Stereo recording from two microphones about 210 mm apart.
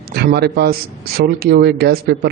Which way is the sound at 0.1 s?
50° right (ahead or behind).